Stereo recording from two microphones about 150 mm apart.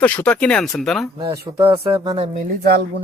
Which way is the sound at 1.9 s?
20° right (ahead or behind).